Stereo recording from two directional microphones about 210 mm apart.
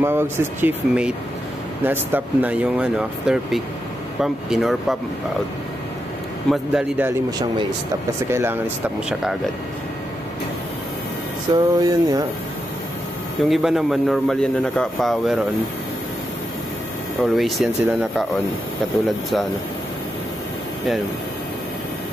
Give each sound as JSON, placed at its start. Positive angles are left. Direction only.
{"t": 0.0, "sound": "a man's voice", "side_deg": -10}
{"t": 6.5, "sound": "speech", "side_deg": -5}
{"t": 11.5, "sound": "speech", "side_deg": -20}
{"t": 13.4, "sound": "a man's voice", "side_deg": 0}
{"t": 17.2, "sound": "a man's voice", "side_deg": 0}